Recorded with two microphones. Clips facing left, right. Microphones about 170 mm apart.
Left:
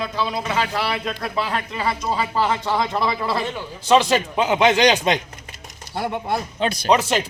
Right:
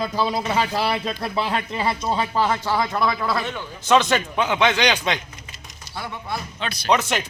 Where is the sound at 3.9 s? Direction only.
35° left (ahead or behind).